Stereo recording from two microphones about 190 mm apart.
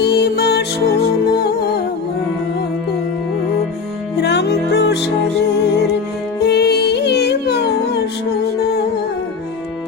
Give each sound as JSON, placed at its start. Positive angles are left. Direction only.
{"t": 0.0, "sound": "music", "side_deg": 60}
{"t": 4.2, "sound": "music", "side_deg": 60}
{"t": 6.4, "sound": "music", "side_deg": 60}